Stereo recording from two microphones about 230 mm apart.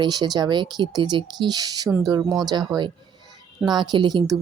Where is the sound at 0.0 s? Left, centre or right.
Centre.